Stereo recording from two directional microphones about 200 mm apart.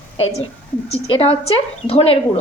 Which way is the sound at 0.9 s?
30° left (ahead or behind).